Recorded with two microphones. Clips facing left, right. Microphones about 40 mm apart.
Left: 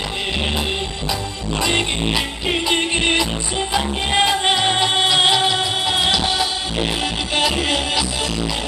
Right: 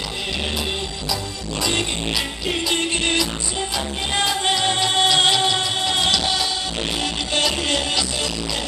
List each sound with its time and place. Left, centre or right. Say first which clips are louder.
1.6 s music: left 3 dB; left